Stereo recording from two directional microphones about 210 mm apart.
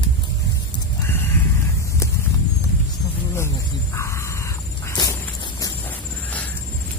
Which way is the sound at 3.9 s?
15° left (ahead or behind).